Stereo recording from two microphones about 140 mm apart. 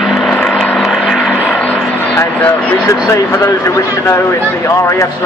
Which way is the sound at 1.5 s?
10° left (ahead or behind).